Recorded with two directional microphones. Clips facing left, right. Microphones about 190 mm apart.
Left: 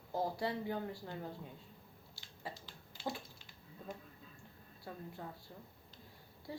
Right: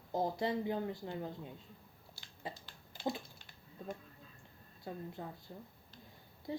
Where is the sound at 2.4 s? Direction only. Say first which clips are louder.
Right 2 dB; 20° right (ahead or behind).